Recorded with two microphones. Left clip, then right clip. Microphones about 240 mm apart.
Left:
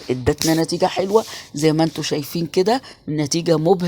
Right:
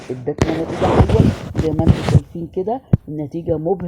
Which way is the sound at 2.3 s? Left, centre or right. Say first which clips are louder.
Left 4 dB; left.